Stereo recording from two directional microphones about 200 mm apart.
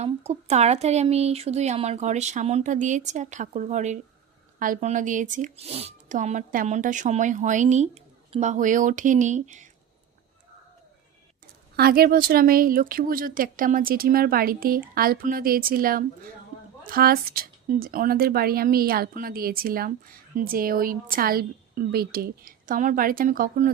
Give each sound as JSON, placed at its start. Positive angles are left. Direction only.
{"t": 0.0, "sound": "speech", "side_deg": -30}
{"t": 11.8, "sound": "speech", "side_deg": -50}